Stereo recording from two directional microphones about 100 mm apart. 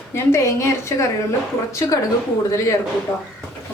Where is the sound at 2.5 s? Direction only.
30° left (ahead or behind).